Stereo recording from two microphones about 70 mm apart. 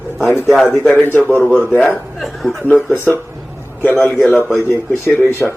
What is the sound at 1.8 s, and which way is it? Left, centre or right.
Speech, centre.